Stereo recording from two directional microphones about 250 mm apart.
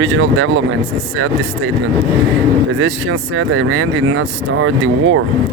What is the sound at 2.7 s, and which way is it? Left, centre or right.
Speech, right.